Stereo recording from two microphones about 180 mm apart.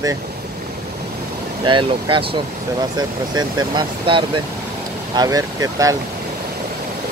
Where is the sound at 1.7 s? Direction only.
25° right (ahead or behind).